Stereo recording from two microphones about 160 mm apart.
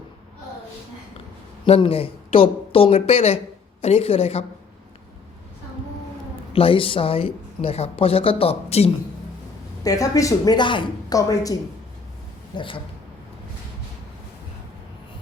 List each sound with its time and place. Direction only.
1.6 s speech: 35° left (ahead or behind)
6.5 s a woman's voice: 35° left (ahead or behind)
9.8 s a woman's voice: 20° left (ahead or behind)
12.5 s a woman's voice: 30° left (ahead or behind)